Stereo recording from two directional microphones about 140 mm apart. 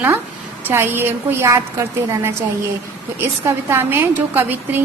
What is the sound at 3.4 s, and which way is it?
A woman's voice, 20° right (ahead or behind).